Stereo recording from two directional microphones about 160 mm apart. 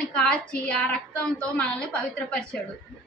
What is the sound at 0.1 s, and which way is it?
A woman's voice, 5° left (ahead or behind).